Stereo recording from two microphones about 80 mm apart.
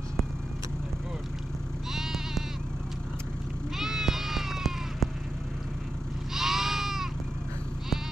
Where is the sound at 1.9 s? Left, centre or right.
Centre.